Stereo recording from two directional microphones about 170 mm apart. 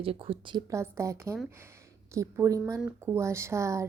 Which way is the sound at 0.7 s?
15° right (ahead or behind).